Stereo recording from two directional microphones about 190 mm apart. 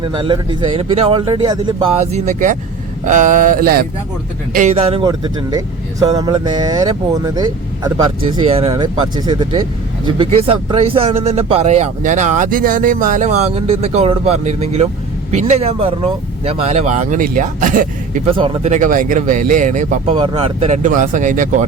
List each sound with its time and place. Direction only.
0.0 s speech: 25° right (ahead or behind); by 3.8 s 50° right (ahead or behind)
4.5 s speech: 35° right (ahead or behind); by 8.4 s 20° right (ahead or behind)
8.4 s speech: 30° right (ahead or behind)
18.3 s speech: 30° right (ahead or behind)
18.7 s speech: 40° right (ahead or behind)
20.1 s speech: 30° right (ahead or behind)